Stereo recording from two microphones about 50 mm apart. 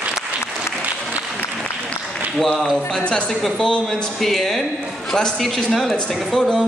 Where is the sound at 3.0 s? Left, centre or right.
Left; by 6.6 s centre.